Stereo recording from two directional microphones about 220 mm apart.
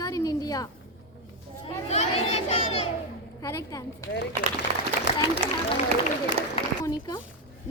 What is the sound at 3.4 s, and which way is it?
Speech, 15° left (ahead or behind).